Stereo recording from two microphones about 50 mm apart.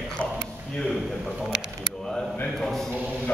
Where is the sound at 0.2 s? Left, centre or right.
Left.